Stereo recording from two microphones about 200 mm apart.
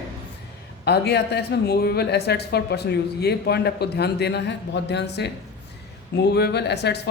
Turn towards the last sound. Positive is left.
turn(degrees=55)  # may be behind; listen again after turning